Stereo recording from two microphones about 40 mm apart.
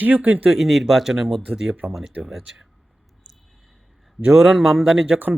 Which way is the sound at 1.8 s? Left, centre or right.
Right.